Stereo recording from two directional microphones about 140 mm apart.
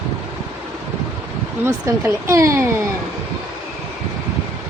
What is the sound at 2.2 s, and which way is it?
Speech, 20° right (ahead or behind).